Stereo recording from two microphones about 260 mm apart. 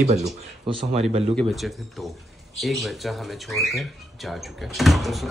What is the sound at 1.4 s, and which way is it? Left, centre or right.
Speech, centre.